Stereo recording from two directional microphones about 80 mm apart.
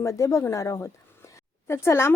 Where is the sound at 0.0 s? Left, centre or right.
Left.